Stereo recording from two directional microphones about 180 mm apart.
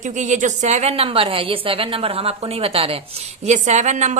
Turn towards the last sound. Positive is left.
turn(degrees=-40)  # may be behind; listen again after turning